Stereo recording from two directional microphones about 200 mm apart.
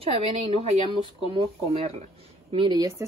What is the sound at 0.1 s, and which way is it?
A woman's voice, 30° right (ahead or behind).